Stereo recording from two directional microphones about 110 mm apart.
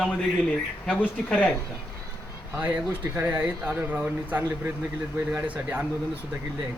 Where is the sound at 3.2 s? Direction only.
15° right (ahead or behind).